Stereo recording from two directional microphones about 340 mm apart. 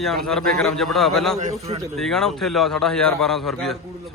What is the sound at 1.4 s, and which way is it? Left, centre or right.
Speech, centre.